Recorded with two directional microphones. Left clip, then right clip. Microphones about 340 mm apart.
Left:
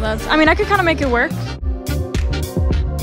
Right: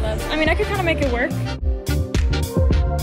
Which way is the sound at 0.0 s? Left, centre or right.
Left.